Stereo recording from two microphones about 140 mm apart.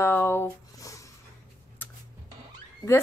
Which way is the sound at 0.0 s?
15° left (ahead or behind).